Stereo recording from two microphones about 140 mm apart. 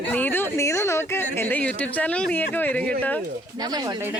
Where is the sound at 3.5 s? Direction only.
30° right (ahead or behind).